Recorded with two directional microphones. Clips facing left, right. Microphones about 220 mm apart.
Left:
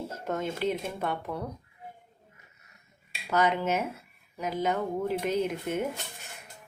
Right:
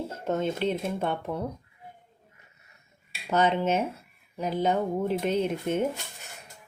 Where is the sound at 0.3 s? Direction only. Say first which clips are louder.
Right 3 dB; 25° right (ahead or behind).